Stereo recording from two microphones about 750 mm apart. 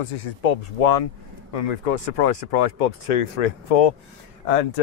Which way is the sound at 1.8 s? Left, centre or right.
Left.